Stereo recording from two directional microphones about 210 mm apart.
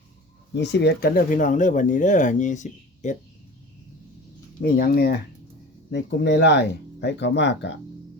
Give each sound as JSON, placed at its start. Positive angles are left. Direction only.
{"t": 0.5, "sound": "speech", "side_deg": 55}
{"t": 4.6, "sound": "speech", "side_deg": 45}
{"t": 5.9, "sound": "speech", "side_deg": 55}